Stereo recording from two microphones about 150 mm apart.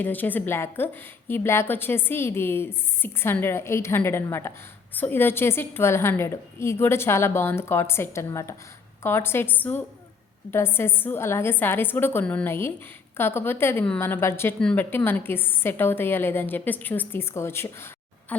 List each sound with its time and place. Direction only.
0.0 s a woman's voice: 10° left (ahead or behind)